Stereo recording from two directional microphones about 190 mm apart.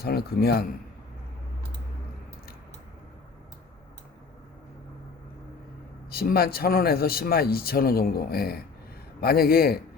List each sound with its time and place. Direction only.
0.0 s a man's voice: 55° left (ahead or behind)
6.1 s a man's voice: 55° left (ahead or behind)